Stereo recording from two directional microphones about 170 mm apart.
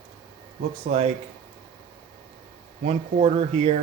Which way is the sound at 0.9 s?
40° right (ahead or behind).